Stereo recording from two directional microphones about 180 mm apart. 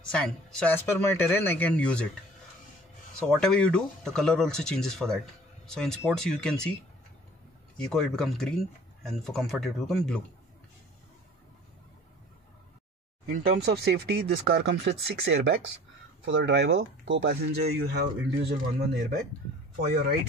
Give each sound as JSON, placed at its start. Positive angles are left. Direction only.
{"t": 0.0, "sound": "speech", "side_deg": 5}
{"t": 3.2, "sound": "speech", "side_deg": 5}
{"t": 13.3, "sound": "speech", "side_deg": -60}
{"t": 16.3, "sound": "speech", "side_deg": -85}